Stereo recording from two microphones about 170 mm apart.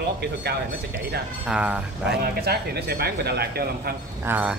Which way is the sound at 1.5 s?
5° right (ahead or behind).